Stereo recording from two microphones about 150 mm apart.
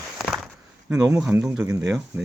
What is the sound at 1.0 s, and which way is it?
Speech, 20° right (ahead or behind).